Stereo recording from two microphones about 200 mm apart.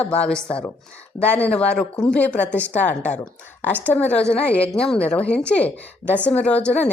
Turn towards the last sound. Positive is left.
turn(degrees=5)  # may be behind; listen again after turning